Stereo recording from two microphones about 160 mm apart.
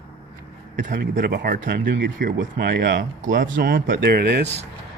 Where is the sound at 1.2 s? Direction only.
80° right.